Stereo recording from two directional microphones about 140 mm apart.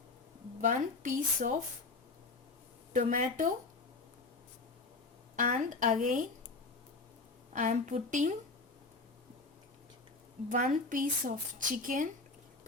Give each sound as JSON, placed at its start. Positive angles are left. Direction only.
{"t": 0.6, "sound": "speech", "side_deg": -65}
{"t": 2.9, "sound": "speech", "side_deg": -70}
{"t": 5.4, "sound": "speech", "side_deg": -65}
{"t": 7.5, "sound": "speech", "side_deg": -60}
{"t": 10.5, "sound": "speech", "side_deg": -65}